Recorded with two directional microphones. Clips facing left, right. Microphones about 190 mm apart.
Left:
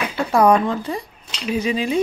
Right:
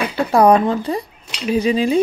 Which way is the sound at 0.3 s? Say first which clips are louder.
Right 3 dB; 35° right (ahead or behind).